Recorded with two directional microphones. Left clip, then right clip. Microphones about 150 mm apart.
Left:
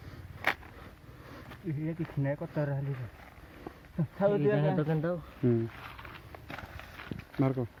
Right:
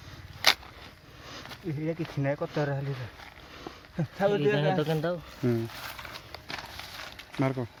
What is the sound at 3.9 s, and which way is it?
Speech, 90° right.